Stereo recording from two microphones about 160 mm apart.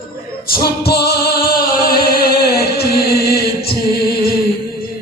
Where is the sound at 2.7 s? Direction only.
80° left.